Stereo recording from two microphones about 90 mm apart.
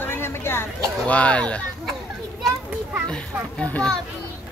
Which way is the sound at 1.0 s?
15° left (ahead or behind).